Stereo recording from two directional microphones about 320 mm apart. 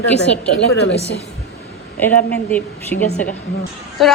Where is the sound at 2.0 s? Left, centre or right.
Centre.